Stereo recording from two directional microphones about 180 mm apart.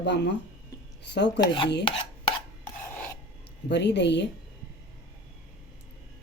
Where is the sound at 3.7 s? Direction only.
70° left (ahead or behind).